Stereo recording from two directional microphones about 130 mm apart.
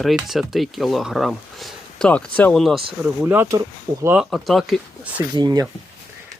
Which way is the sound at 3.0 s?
15° right (ahead or behind).